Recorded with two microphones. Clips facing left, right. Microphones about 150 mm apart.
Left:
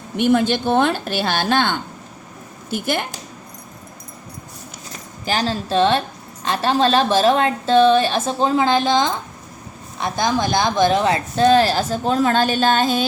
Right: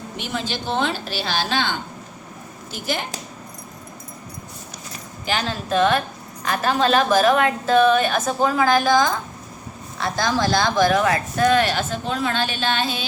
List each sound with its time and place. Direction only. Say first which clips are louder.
0.2 s a woman's voice: left 12 dB; 55° left (ahead or behind)
5.2 s a woman's voice: left 3 dB; 35° left (ahead or behind)